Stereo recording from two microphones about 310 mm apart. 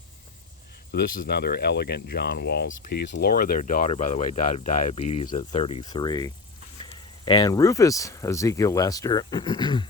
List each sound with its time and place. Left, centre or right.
0.9 s speech: left